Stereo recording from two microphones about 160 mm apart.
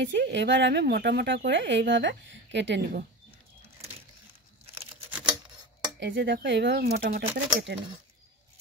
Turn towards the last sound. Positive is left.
turn(degrees=-90)